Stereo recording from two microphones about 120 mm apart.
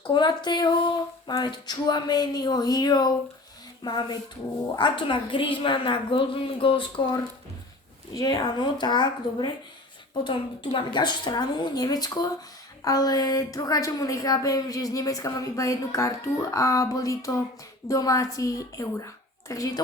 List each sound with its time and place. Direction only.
0.1 s a woman's voice: 40° left (ahead or behind)